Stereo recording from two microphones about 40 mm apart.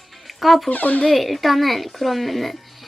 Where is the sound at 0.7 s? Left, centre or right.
Left.